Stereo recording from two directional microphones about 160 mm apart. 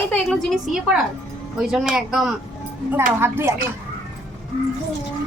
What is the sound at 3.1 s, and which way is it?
Speech, 15° right (ahead or behind).